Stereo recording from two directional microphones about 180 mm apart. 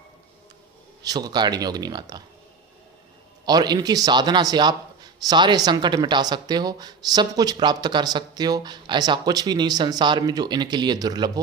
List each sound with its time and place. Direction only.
1.0 s speech: 20° right (ahead or behind)
3.4 s speech: 20° right (ahead or behind)